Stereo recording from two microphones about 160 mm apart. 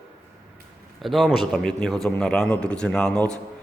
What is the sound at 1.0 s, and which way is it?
A man's voice, centre (ahead or behind).